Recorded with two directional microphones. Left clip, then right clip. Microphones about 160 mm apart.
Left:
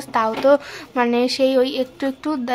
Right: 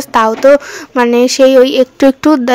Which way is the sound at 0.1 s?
45° right (ahead or behind).